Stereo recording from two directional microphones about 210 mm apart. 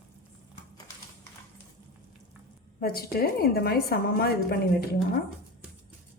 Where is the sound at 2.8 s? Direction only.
45° left (ahead or behind).